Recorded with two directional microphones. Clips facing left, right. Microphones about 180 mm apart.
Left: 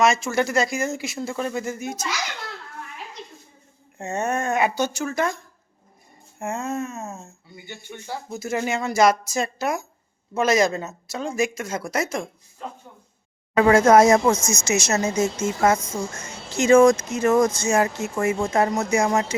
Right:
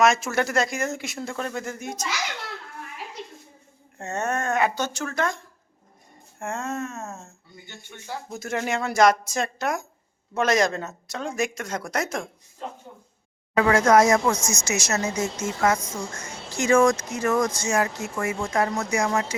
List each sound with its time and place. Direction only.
0.0 s speech: centre (ahead or behind)
3.9 s speech: 10° left (ahead or behind)
6.4 s speech: 10° left (ahead or behind)
13.7 s speech: 25° left (ahead or behind)